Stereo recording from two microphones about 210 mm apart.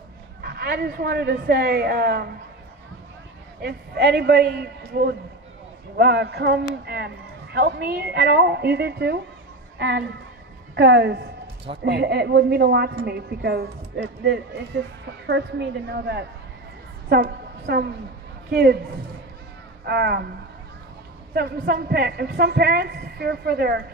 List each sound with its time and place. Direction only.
0.4 s a man's voice: 50° right (ahead or behind)
3.6 s a man's voice: 50° right (ahead or behind)
19.8 s speech: 50° right (ahead or behind)
21.3 s a man's voice: 50° right (ahead or behind)